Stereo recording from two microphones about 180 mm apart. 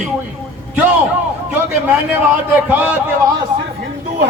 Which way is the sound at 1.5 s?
10° right (ahead or behind).